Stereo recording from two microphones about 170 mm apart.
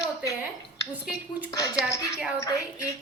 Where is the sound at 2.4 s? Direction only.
20° left (ahead or behind).